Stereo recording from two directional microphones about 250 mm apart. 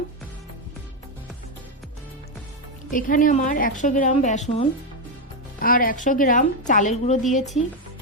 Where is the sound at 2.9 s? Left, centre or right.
Left.